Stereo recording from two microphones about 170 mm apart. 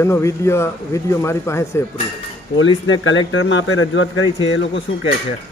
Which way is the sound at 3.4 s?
90° left.